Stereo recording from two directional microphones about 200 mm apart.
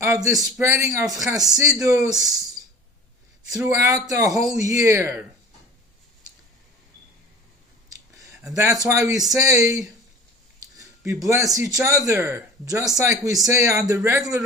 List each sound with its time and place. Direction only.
0.0 s speech: 15° right (ahead or behind)
3.5 s speech: 15° right (ahead or behind)
7.9 s a sound: 15° right (ahead or behind)
8.5 s speech: 15° right (ahead or behind)
10.8 s a sound: 15° right (ahead or behind)
11.5 s speech: 15° right (ahead or behind)